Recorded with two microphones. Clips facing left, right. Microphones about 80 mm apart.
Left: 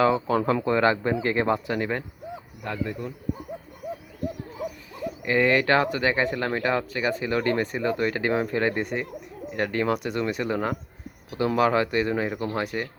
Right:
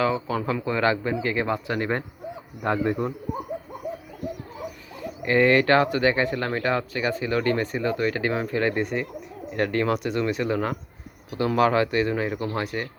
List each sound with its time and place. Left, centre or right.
0.0 s speech: left
0.8 s speech: left
1.5 s speech: centre
2.6 s speech: right
5.2 s speech: centre